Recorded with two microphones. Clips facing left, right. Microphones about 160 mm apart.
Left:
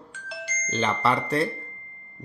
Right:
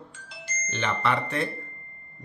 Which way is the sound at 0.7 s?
35° left (ahead or behind).